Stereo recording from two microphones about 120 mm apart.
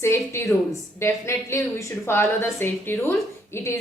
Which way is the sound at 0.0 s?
20° left (ahead or behind).